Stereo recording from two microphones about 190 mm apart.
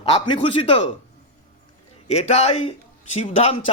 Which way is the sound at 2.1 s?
30° left (ahead or behind).